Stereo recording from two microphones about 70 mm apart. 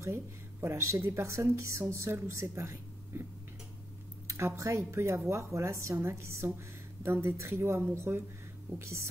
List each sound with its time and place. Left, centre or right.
0.0 s a woman's voice: right
4.3 s a woman's voice: right